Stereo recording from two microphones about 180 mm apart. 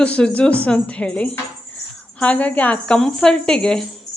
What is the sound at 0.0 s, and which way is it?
Speech, 5° left (ahead or behind).